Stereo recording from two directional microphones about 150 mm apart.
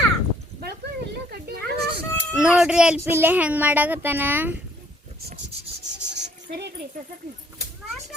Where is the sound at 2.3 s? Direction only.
5° right (ahead or behind).